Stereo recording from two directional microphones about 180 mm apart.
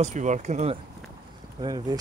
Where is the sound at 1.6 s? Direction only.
20° right (ahead or behind).